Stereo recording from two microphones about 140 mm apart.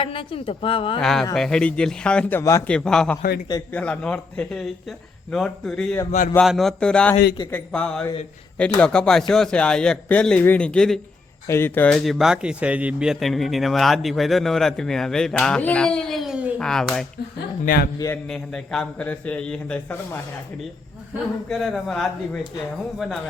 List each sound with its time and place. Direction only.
0.0 s a woman's voice: 40° left (ahead or behind)
1.0 s a man's voice: 5° left (ahead or behind)
2.4 s a man's voice: 20° left (ahead or behind)
2.6 s speech: 5° left (ahead or behind)
6.1 s speech: 70° left (ahead or behind)
6.4 s a man's voice: centre (ahead or behind)
11.4 s a man's voice: 15° left (ahead or behind)
11.9 s speech: centre (ahead or behind)
16.6 s speech: 5° left (ahead or behind)
17.7 s speech: 70° left (ahead or behind)
18.3 s a man's voice: 5° left (ahead or behind)
21.5 s speech: centre (ahead or behind)